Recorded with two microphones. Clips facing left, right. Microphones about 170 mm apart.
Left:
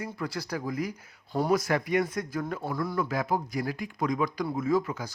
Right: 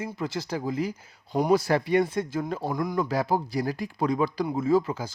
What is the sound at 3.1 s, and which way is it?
Speech, 30° right (ahead or behind).